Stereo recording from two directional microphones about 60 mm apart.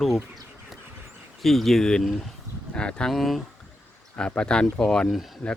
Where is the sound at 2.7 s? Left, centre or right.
Centre.